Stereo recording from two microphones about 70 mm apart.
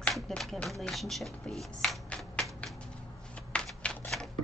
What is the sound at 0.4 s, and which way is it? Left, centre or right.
A woman's voice, centre.